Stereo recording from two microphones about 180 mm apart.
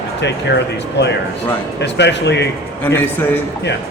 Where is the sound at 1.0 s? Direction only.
75° left (ahead or behind).